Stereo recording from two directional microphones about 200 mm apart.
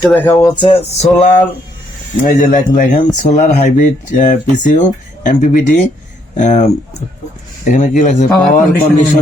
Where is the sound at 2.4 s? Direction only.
40° left (ahead or behind).